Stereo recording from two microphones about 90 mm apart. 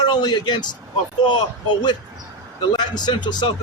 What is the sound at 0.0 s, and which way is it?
A man's voice, 50° left (ahead or behind).